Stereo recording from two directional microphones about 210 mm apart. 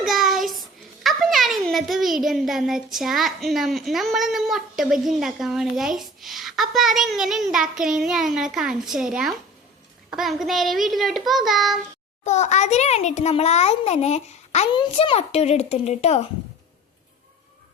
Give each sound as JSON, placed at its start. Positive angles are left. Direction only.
{"t": 0.0, "sound": "a child's voice", "side_deg": 0}
{"t": 12.2, "sound": "a child's voice", "side_deg": 35}